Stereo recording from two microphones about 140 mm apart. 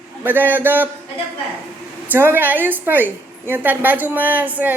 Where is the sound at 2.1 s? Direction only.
15° right (ahead or behind).